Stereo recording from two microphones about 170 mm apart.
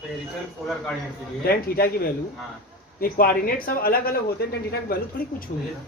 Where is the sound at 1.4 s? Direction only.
60° left (ahead or behind).